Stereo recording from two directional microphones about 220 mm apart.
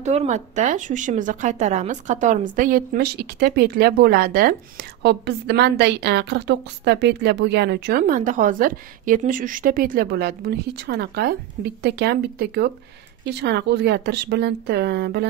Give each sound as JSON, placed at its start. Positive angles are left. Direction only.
{"t": 0.0, "sound": "speech", "side_deg": -30}